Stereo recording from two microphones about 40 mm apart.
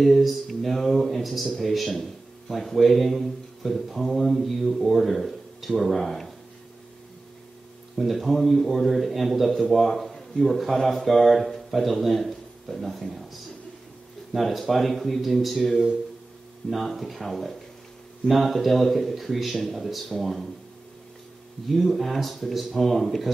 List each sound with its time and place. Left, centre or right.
0.0 s a man's voice: centre
8.0 s a man's voice: centre
21.6 s a man's voice: centre